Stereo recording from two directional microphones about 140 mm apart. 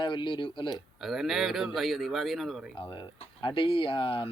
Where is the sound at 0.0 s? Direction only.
35° left (ahead or behind).